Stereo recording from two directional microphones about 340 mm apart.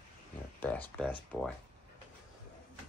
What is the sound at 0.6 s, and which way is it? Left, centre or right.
Speech, centre.